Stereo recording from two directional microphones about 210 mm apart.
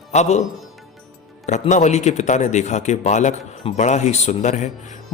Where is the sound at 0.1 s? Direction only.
35° left (ahead or behind).